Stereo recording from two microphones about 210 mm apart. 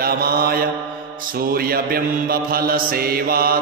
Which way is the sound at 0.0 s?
45° right (ahead or behind).